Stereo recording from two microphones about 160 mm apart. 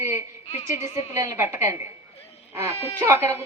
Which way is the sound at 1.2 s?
15° right (ahead or behind).